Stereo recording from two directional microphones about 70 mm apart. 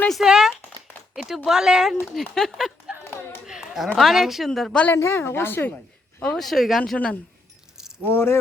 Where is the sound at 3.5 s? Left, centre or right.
Centre.